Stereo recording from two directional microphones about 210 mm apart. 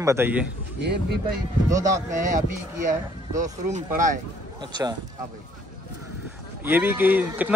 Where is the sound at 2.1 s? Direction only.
35° right (ahead or behind).